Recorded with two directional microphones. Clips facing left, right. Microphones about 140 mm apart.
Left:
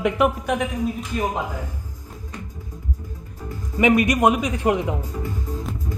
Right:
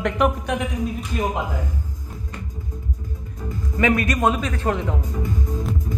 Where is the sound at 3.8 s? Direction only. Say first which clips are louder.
Left 3 dB; 20° left (ahead or behind).